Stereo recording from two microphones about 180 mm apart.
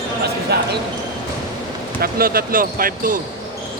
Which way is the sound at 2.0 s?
55° right (ahead or behind).